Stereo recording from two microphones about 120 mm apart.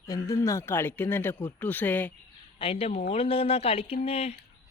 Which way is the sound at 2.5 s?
50° left (ahead or behind).